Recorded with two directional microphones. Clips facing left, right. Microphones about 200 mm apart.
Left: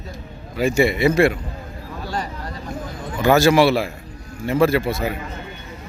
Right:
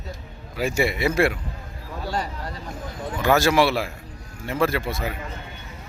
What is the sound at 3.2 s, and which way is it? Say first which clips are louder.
Speech: left 4 dB; centre (ahead or behind).